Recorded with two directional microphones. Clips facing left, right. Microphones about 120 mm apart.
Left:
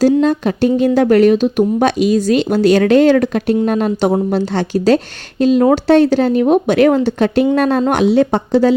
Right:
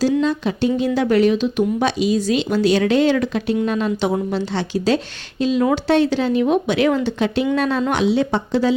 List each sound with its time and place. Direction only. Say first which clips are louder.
0.2 s speech: left 5 dB; 50° left (ahead or behind)